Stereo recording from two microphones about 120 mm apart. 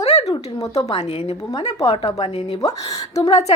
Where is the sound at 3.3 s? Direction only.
65° left (ahead or behind).